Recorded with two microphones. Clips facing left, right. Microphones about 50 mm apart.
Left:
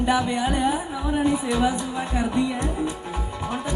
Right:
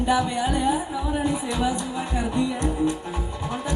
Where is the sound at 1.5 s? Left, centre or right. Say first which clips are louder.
Left 2 dB; left.